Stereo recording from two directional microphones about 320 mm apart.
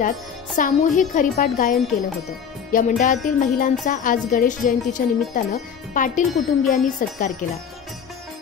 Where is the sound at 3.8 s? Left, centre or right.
Left.